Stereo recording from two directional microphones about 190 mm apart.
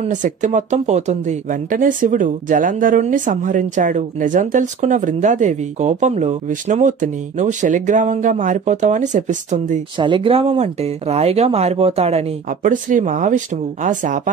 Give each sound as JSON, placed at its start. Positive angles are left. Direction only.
{"t": 0.0, "sound": "speech", "side_deg": -40}
{"t": 9.9, "sound": "speech", "side_deg": -25}